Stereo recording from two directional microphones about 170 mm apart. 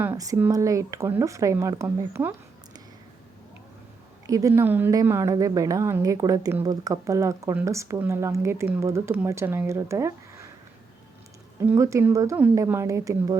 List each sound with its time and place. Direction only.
0.0 s a woman's voice: 20° right (ahead or behind)
4.3 s a woman's voice: 20° right (ahead or behind)
11.7 s a woman's voice: 15° right (ahead or behind)